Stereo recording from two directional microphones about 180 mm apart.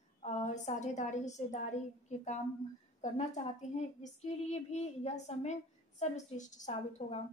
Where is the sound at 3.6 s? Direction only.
40° left (ahead or behind).